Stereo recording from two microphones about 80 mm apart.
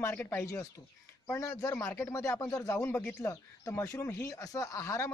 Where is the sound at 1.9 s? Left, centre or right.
Left.